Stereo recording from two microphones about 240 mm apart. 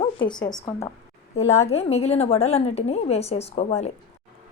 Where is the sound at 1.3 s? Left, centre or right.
Left.